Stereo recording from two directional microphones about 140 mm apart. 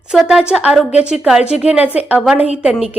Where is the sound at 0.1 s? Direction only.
5° right (ahead or behind).